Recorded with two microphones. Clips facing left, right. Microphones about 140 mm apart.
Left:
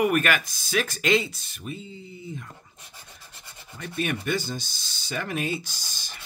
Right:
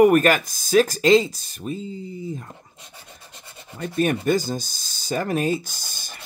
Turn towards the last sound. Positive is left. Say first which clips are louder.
# right 3 dB
turn(degrees=-50)  # may be behind; listen again after turning